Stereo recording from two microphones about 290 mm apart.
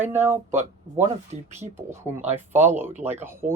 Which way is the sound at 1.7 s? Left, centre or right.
Centre.